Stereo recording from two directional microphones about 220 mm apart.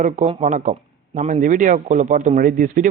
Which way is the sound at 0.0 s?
35° right (ahead or behind).